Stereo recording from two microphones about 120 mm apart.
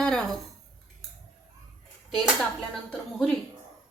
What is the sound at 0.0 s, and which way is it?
Dishes, 5° left (ahead or behind).